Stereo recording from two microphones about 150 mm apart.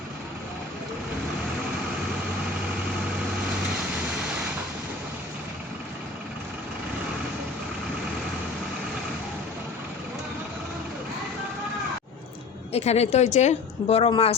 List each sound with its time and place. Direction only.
12.7 s a woman's voice: 45° left (ahead or behind)